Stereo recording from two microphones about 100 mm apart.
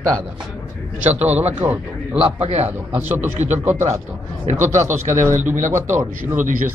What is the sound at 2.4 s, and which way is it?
Speech, 90° right.